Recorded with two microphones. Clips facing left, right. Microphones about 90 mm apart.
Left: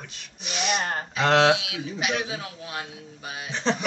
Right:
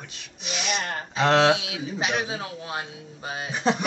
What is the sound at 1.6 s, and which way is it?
A man's voice, 30° right (ahead or behind).